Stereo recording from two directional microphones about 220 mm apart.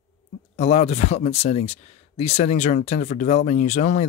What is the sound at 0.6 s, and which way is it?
Speech, 30° left (ahead or behind).